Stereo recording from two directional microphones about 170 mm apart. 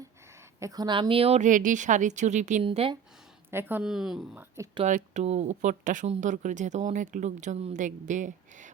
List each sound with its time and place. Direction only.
0.6 s speech: 25° right (ahead or behind); by 2.6 s 45° right (ahead or behind)
2.6 s speech: 30° right (ahead or behind)
3.5 s a woman's voice: 10° right (ahead or behind)
4.5 s speech: 20° right (ahead or behind)
4.8 s speech: 45° right (ahead or behind)